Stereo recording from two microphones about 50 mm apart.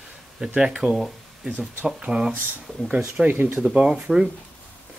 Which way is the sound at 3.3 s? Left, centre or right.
Right.